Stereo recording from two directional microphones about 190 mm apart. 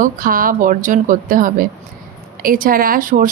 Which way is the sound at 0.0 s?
45° right (ahead or behind).